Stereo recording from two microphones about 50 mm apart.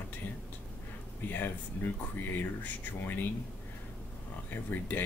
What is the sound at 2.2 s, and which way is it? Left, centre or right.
Speech, left.